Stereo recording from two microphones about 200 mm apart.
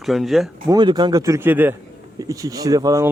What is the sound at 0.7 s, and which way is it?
Speech, 20° right (ahead or behind).